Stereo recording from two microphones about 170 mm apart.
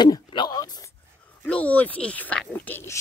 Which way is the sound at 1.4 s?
10° left (ahead or behind).